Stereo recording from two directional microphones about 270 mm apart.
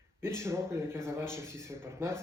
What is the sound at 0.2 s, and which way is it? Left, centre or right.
Speech, centre.